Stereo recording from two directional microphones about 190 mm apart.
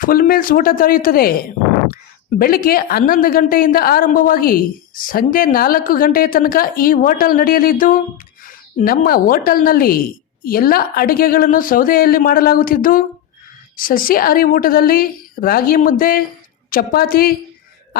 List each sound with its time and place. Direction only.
0.0 s a woman's voice: 50° left (ahead or behind)
2.4 s a woman's voice: 50° left (ahead or behind)